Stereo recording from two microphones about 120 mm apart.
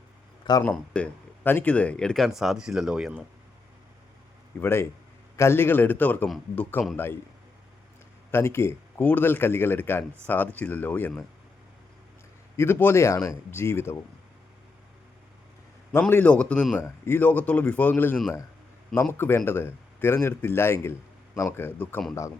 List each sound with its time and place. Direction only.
0.6 s speech: 10° left (ahead or behind); by 3.2 s 10° right (ahead or behind)
4.6 s a man's voice: 20° left (ahead or behind)
8.3 s a man's voice: 20° left (ahead or behind)
12.5 s a man's voice: 20° left (ahead or behind)
15.9 s a man's voice: 20° left (ahead or behind)